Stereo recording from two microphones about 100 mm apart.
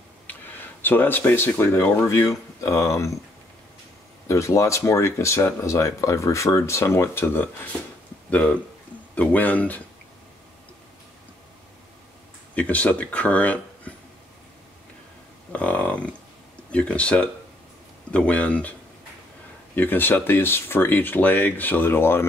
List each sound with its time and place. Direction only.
0.8 s speech: 20° left (ahead or behind)
4.3 s speech: 30° left (ahead or behind); by 9.8 s 15° left (ahead or behind)
12.5 s speech: 15° left (ahead or behind)
15.5 s speech: 15° left (ahead or behind)